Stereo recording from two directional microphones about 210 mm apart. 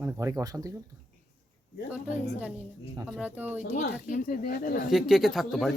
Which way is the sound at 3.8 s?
35° left (ahead or behind).